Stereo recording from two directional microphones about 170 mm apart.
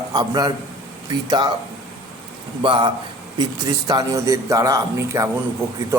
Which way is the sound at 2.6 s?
30° right (ahead or behind).